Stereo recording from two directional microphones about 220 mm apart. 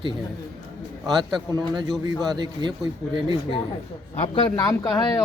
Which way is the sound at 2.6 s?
20° right (ahead or behind).